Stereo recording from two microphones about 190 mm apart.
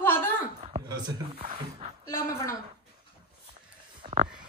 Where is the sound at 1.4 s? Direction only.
35° right (ahead or behind).